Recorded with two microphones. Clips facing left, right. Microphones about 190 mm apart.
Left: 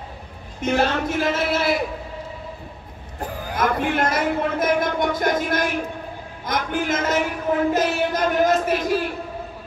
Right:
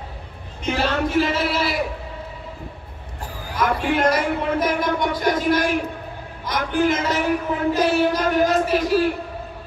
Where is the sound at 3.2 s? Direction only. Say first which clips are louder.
Left 1 dB; 55° left (ahead or behind).